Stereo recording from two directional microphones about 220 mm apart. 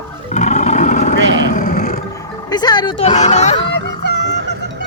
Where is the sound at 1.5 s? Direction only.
35° left (ahead or behind).